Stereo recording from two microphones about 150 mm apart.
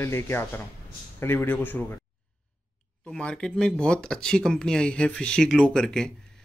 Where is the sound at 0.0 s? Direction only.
15° left (ahead or behind).